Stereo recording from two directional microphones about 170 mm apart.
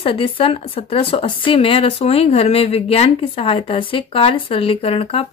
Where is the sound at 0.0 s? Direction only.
30° left (ahead or behind).